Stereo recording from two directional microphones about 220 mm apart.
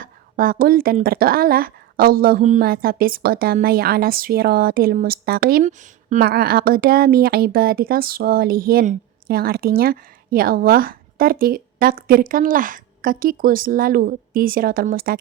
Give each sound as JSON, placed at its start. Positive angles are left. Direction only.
{"t": 0.0, "sound": "speech", "side_deg": -40}